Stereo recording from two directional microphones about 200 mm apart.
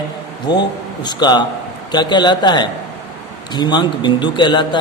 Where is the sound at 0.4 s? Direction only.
20° left (ahead or behind).